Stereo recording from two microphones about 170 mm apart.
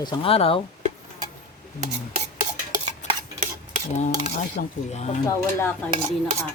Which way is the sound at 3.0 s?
45° left (ahead or behind).